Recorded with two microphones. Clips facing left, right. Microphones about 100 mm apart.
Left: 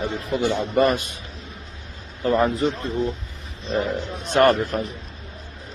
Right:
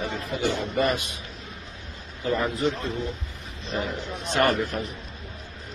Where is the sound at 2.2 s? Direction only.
35° left (ahead or behind).